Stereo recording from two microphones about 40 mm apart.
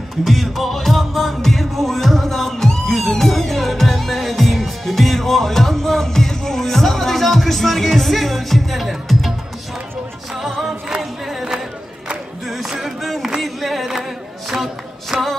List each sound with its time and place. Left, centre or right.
0.2 s music: centre
10.4 s music: centre
12.6 s music: centre
13.4 s singing: centre
14.5 s a sound: centre